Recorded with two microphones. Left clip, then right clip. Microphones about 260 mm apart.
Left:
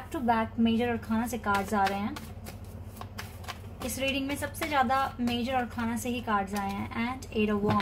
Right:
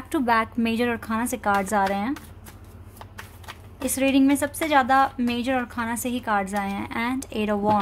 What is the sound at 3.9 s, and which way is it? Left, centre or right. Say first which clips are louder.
A woman's voice: right 11 dB; right.